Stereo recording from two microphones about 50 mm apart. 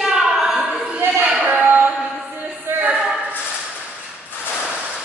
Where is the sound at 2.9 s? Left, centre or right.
Centre.